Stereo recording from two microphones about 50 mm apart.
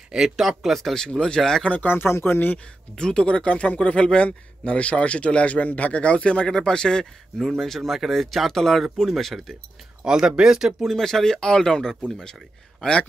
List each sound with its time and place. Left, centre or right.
0.1 s speech: centre
0.7 s speech: centre
1.9 s speech: left
3.0 s a man's voice: centre
10.0 s speech: centre
10.8 s speech: centre